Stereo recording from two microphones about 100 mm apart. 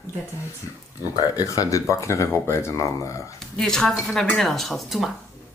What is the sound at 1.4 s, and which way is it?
Speech, 35° left (ahead or behind).